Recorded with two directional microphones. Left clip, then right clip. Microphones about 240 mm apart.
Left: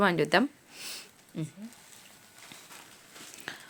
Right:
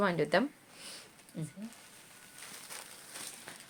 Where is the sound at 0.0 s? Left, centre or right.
Left.